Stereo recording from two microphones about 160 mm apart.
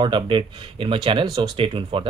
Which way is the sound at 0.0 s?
30° right (ahead or behind).